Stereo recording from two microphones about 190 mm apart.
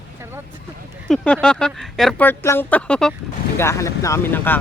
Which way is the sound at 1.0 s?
5° left (ahead or behind).